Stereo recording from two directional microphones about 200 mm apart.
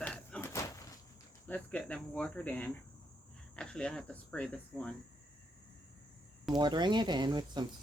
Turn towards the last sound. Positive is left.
turn(degrees=-20)  # may be behind; listen again after turning